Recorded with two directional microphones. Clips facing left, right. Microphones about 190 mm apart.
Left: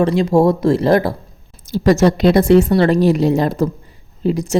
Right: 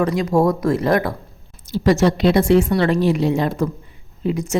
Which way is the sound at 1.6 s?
45° left (ahead or behind).